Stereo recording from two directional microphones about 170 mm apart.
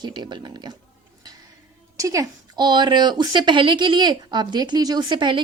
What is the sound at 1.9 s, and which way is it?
A woman's voice, 20° right (ahead or behind).